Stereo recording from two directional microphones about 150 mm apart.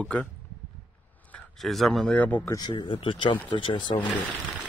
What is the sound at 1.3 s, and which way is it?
A man's voice, centre (ahead or behind).